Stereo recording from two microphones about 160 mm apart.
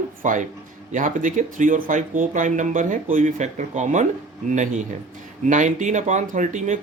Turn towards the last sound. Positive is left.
turn(degrees=-50)  # may be behind; listen again after turning